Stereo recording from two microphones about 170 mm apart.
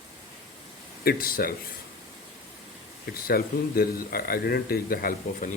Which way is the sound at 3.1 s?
60° left (ahead or behind).